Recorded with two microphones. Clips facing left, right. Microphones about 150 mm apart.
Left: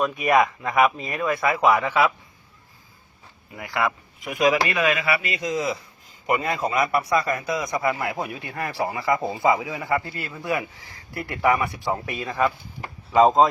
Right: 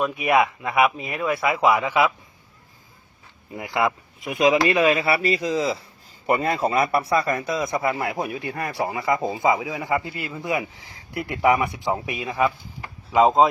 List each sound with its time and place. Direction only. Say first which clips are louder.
0.0 s speech: even; 10° right (ahead or behind)
3.5 s a man's voice: right 2 dB; 25° right (ahead or behind)